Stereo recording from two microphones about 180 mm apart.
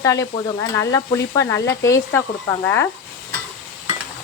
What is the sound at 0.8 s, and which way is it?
Stir, 15° left (ahead or behind).